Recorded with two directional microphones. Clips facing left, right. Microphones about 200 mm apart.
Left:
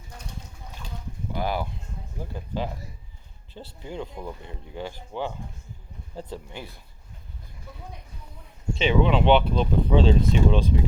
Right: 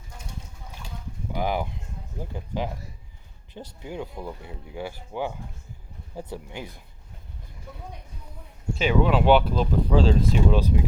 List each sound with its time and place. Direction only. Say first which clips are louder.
1.3 s speech: right 1 dB; 15° right (ahead or behind)
3.5 s speech: right 1 dB; 10° right (ahead or behind)
8.7 s speech: even; 5° right (ahead or behind)